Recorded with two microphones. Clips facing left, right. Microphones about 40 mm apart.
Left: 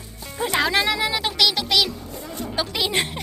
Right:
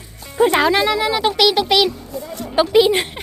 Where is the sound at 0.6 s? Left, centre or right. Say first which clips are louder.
Right 5 dB; centre.